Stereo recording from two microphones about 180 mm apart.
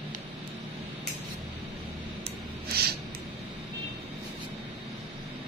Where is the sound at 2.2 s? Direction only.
60° right (ahead or behind).